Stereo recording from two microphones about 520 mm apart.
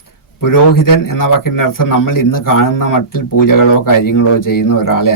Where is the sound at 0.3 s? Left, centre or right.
Left.